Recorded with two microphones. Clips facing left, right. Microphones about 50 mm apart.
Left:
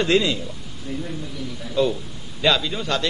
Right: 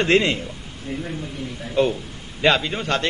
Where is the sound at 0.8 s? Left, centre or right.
Right.